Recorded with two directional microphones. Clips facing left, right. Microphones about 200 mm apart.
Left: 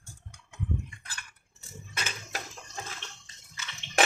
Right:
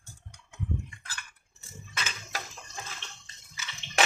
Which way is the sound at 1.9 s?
50° left (ahead or behind).